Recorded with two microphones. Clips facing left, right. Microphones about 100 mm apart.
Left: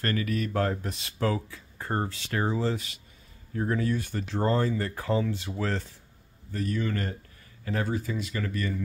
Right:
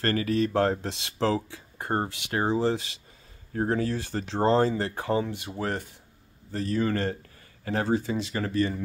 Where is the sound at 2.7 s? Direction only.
90° right.